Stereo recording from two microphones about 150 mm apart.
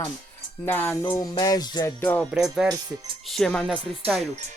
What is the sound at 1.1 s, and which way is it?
Music, 25° left (ahead or behind).